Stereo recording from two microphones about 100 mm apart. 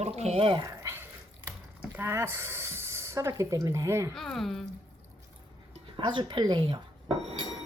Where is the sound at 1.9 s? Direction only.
25° right (ahead or behind).